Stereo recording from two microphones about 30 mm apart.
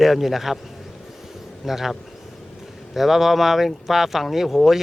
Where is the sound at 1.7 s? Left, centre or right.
Centre.